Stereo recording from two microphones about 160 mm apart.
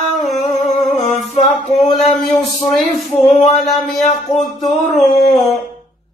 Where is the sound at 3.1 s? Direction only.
40° left (ahead or behind).